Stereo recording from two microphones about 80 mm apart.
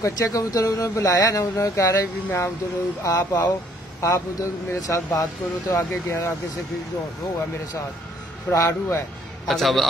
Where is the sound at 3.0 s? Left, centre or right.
Left.